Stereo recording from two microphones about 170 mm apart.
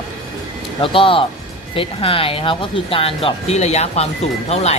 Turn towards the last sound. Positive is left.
turn(degrees=40)  # may be behind; listen again after turning